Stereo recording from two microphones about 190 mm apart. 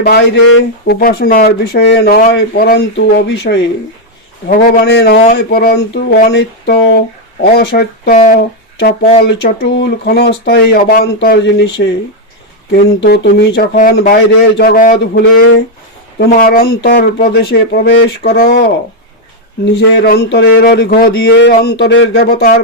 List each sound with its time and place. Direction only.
0.0 s speech: 60° left (ahead or behind)
2.0 s speech: 45° left (ahead or behind)
2.3 s speech: 55° left (ahead or behind)
3.2 s speech: 70° left (ahead or behind)
4.4 s speech: 50° left (ahead or behind)
8.1 s speech: 40° left (ahead or behind)
9.2 s speech: 60° left (ahead or behind)
13.7 s speech: 45° left (ahead or behind)
20.1 s speech: 65° left (ahead or behind)
22.1 s speech: 55° left (ahead or behind)